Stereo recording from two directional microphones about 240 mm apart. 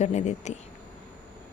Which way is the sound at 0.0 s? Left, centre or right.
Left.